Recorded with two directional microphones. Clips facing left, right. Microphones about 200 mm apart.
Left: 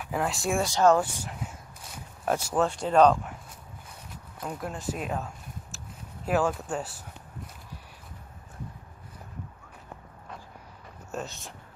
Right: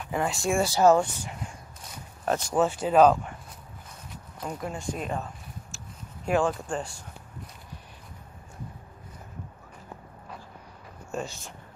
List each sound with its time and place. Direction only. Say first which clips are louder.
0.0 s speech: right 1 dB; centre (ahead or behind)
1.1 s speech: even; 5° left (ahead or behind)
4.4 s speech: right 1 dB; centre (ahead or behind)
11.1 s speech: right 2 dB; centre (ahead or behind)